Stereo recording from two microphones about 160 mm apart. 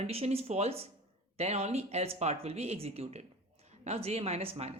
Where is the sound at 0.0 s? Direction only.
40° right (ahead or behind).